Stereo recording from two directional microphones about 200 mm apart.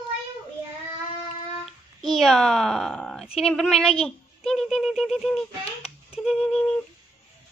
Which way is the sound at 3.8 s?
30° left (ahead or behind).